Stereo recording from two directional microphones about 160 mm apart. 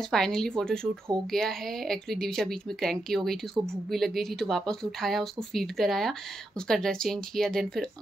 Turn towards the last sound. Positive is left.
turn(degrees=0)  # may be behind; listen again after turning